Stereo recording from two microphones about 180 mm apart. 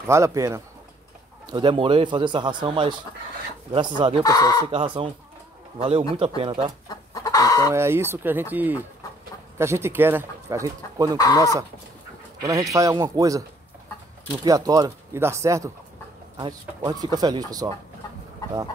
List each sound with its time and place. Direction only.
0.0 s speech: 15° right (ahead or behind)
1.5 s a man's voice: 25° right (ahead or behind)
4.2 s speech: 20° left (ahead or behind)
4.6 s a man's voice: 30° right (ahead or behind)
6.9 s chicken: 20° left (ahead or behind)
7.7 s speech: 15° right (ahead or behind)
11.1 s speech: 20° left (ahead or behind)
12.4 s a man's voice: 20° right (ahead or behind)
14.4 s a man's voice: 20° right (ahead or behind)